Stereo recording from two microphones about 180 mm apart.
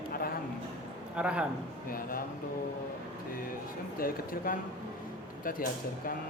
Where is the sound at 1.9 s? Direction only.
50° left (ahead or behind).